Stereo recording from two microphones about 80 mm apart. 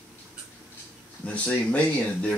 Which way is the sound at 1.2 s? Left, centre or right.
Centre.